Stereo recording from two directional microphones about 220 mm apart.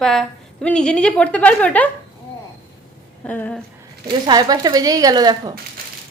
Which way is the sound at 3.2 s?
5° left (ahead or behind).